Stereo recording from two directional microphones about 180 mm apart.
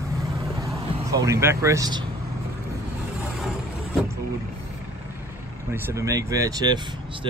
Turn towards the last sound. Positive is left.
turn(degrees=-20)  # may be behind; listen again after turning